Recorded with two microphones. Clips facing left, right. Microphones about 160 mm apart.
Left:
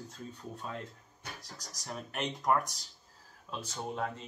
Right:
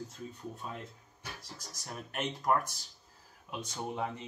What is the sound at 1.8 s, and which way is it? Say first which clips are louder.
Speech: left 1 dB; 5° right (ahead or behind).